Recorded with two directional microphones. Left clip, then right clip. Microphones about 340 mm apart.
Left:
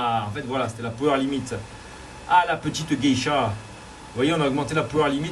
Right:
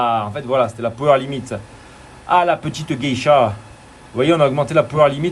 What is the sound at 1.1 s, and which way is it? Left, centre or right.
A man's voice, centre.